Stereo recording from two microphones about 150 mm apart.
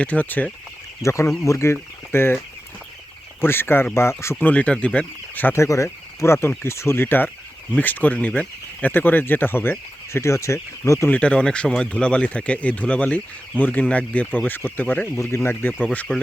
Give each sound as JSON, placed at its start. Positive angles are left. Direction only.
{"t": 0.0, "sound": "speech", "side_deg": 10}
{"t": 3.4, "sound": "speech", "side_deg": 15}
{"t": 11.1, "sound": "speech", "side_deg": 5}